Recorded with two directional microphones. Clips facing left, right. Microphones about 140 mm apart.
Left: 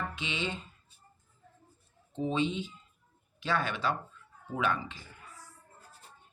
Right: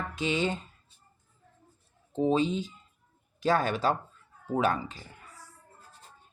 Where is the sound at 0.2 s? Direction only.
45° right (ahead or behind).